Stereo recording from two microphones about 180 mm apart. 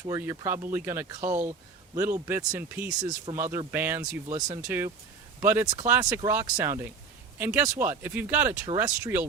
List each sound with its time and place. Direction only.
0.1 s speech: 15° right (ahead or behind)